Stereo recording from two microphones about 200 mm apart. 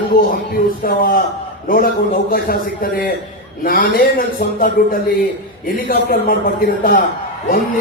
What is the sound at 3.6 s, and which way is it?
A man's voice, 45° left (ahead or behind).